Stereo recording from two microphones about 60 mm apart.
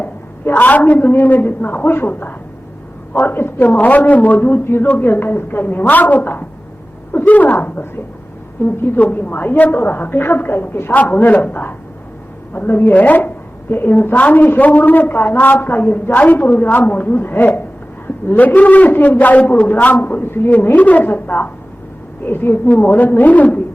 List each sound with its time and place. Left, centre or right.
0.0 s a woman's voice: left
18.9 s a man's voice: left